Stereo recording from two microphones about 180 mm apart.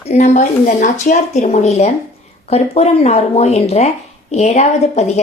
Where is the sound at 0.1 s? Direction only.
40° left (ahead or behind).